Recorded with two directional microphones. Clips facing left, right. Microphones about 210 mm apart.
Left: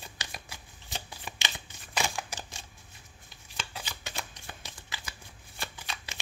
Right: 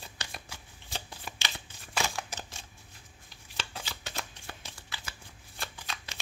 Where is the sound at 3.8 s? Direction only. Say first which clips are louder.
Even; 15° left (ahead or behind).